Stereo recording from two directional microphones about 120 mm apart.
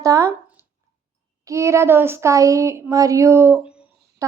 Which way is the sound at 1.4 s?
25° right (ahead or behind).